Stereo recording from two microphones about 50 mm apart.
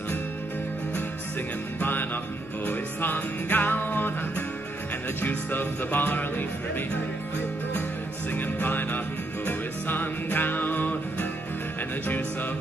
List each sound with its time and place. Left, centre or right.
1.8 s music: left
8.4 s music: left